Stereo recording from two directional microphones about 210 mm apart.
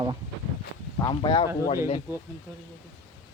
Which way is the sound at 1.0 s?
20° left (ahead or behind).